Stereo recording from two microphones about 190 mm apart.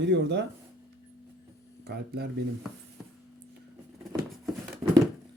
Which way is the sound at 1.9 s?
55° right (ahead or behind).